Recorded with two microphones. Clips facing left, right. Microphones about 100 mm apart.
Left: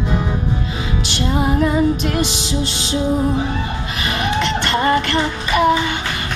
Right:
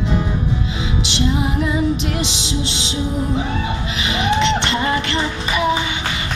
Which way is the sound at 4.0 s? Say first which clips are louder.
Right 2 dB; 50° left (ahead or behind).